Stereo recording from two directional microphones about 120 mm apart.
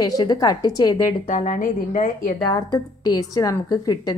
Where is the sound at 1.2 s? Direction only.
85° left.